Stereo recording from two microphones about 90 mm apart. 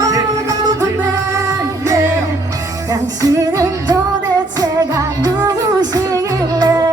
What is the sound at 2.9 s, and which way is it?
Music, 40° right (ahead or behind).